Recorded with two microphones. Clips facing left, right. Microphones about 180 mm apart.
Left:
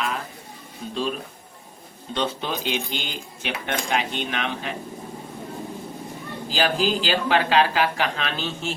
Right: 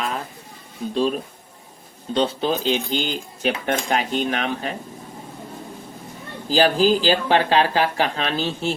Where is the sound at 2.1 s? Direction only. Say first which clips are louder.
Right 6 dB; 30° right (ahead or behind).